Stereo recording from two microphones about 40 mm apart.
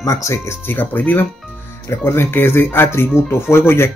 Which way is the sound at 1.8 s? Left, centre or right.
Left.